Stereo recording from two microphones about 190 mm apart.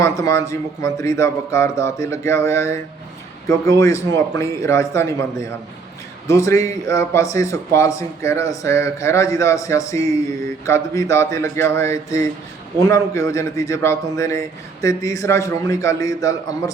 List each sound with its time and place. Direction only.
0.0 s a man's voice: 15° left (ahead or behind)
6.2 s a man's voice: 15° left (ahead or behind)
12.9 s a man's voice: 15° left (ahead or behind)